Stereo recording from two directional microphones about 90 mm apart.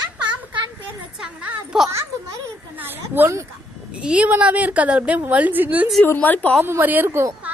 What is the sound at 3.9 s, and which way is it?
A woman's voice, 10° right (ahead or behind).